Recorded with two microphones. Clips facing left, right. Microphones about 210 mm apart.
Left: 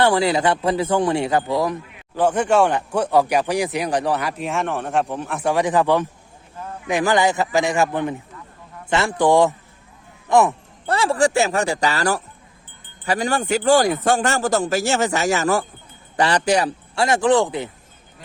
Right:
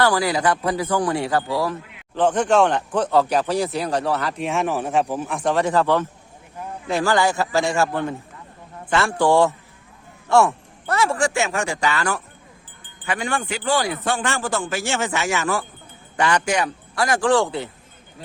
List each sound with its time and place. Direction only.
0.0 s a man's voice: 25° left (ahead or behind)
4.4 s a man's voice: centre (ahead or behind); by 10.5 s 15° left (ahead or behind)
10.8 s speech: 30° left (ahead or behind)